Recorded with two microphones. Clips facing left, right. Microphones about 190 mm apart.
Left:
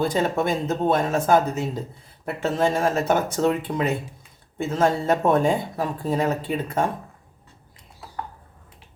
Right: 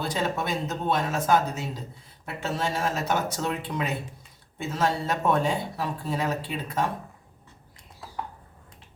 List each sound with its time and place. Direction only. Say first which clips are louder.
0.0 s speech: left 6 dB; 50° left (ahead or behind)